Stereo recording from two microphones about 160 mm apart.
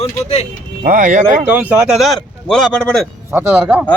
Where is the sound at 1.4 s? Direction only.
10° right (ahead or behind).